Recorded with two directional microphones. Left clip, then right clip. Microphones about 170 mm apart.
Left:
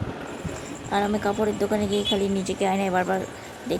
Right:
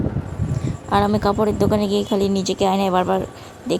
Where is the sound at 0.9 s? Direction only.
35° right (ahead or behind).